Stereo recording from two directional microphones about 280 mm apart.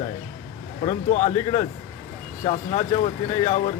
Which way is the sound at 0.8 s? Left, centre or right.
Left.